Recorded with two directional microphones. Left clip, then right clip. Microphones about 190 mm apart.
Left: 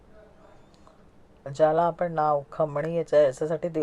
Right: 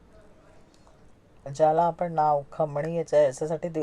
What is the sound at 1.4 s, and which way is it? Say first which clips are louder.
Speech: even; 25° left (ahead or behind).